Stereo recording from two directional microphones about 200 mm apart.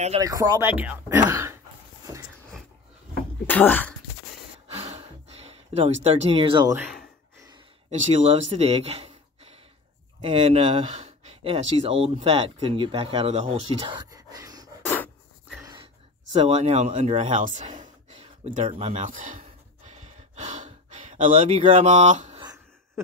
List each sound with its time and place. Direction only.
0.2 s speech: 20° right (ahead or behind)
3.4 s speech: 10° left (ahead or behind)
4.7 s sigh: 30° right (ahead or behind)
6.0 s speech: 30° right (ahead or behind)
6.8 s gasp: centre (ahead or behind)
8.1 s speech: 30° right (ahead or behind)
15.6 s a sound: 20° right (ahead or behind)
16.3 s speech: 30° right (ahead or behind)
19.9 s sigh: 35° right (ahead or behind)
21.5 s speech: 30° right (ahead or behind)